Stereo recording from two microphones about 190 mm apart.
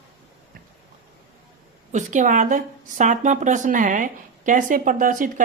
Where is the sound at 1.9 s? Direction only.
40° right (ahead or behind).